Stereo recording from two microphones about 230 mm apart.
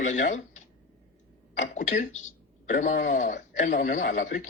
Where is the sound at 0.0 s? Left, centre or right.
Left.